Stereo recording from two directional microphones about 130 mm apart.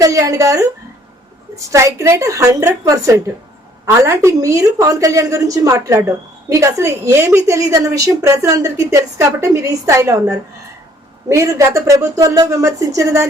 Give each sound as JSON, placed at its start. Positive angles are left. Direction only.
{"t": 0.0, "sound": "a woman's voice", "side_deg": -25}